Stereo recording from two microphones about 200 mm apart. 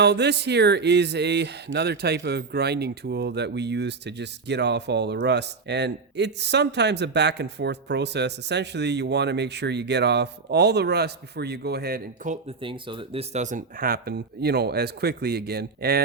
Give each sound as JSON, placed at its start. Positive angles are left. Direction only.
{"t": 0.0, "sound": "speech", "side_deg": -55}
{"t": 12.6, "sound": "speech", "side_deg": -25}